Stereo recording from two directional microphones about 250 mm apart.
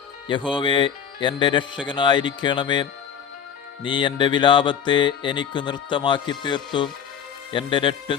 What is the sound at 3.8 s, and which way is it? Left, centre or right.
Speech, centre.